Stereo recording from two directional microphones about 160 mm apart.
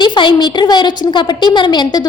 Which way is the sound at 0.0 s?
30° left (ahead or behind).